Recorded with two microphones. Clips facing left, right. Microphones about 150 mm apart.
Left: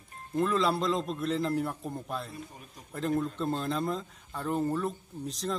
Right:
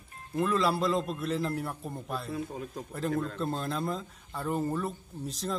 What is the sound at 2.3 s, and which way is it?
Speech, 90° right.